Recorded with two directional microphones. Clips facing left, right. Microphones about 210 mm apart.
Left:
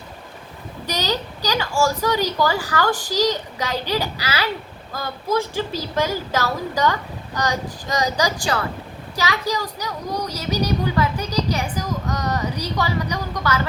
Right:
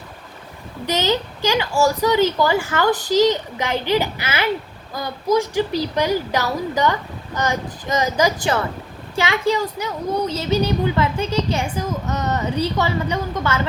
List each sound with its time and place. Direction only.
0.9 s a child's voice: 20° right (ahead or behind)